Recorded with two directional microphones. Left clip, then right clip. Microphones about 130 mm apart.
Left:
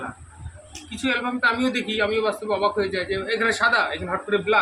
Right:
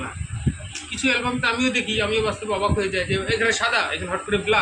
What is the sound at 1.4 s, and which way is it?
A man's voice, 40° left (ahead or behind).